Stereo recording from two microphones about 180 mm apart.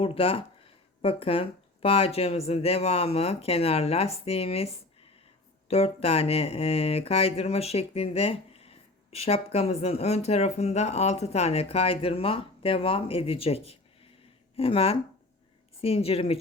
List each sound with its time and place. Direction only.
0.0 s speech: 30° left (ahead or behind)